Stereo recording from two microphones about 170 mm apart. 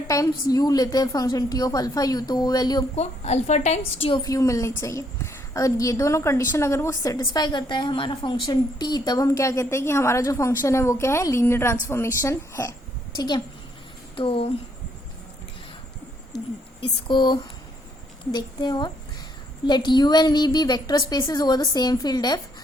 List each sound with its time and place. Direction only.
0.1 s a woman's voice: 20° left (ahead or behind)
2.9 s a woman's voice: 40° left (ahead or behind)
16.8 s a woman's voice: 25° left (ahead or behind)